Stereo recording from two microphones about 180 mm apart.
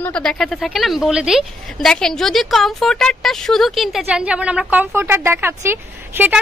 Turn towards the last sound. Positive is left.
turn(degrees=-10)  # may be behind; listen again after turning